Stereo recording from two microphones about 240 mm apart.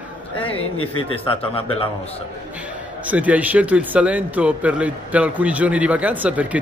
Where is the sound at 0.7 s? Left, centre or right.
Left.